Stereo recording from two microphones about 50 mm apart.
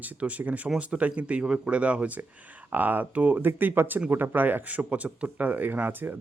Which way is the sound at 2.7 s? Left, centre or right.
Right.